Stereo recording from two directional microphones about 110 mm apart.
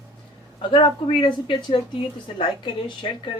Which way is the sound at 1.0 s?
60° left (ahead or behind).